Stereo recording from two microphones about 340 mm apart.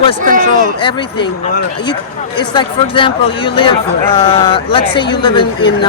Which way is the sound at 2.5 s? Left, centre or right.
Centre.